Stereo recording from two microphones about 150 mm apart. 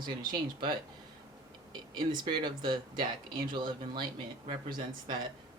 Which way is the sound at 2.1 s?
30° right (ahead or behind).